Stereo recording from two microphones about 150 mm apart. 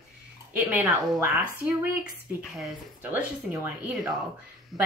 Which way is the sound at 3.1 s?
15° right (ahead or behind).